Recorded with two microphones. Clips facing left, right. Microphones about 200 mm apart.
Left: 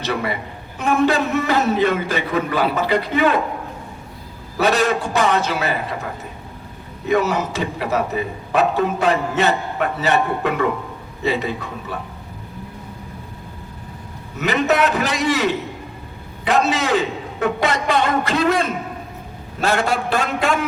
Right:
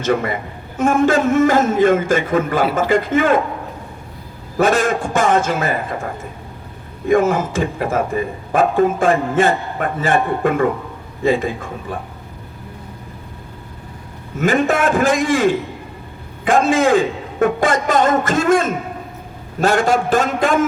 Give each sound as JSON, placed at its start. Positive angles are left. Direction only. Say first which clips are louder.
{"t": 0.0, "sound": "a man's voice", "louder": "right 5 dB", "side_deg": -45}
{"t": 4.5, "sound": "a man's voice", "louder": "right 2 dB", "side_deg": -50}
{"t": 7.1, "sound": "a man's voice", "louder": "right 4 dB", "side_deg": -50}
{"t": 14.3, "sound": "a man's voice", "louder": "right 2 dB", "side_deg": -50}